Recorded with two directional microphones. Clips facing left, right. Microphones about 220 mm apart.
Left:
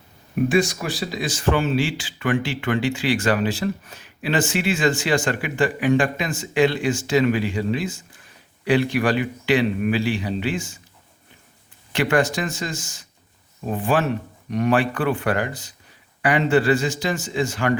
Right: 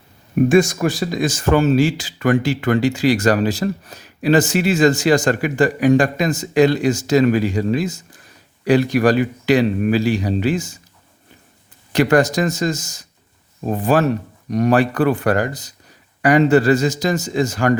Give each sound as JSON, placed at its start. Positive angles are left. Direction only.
{"t": 0.4, "sound": "speech", "side_deg": -45}
{"t": 11.9, "sound": "speech", "side_deg": -40}